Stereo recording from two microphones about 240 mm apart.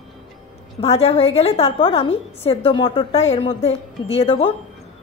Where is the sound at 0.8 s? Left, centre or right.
Left.